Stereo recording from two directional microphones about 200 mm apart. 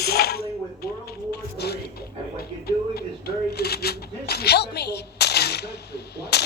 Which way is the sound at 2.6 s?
50° left (ahead or behind).